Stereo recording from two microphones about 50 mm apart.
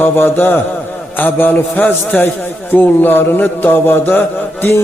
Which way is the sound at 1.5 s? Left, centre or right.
Left.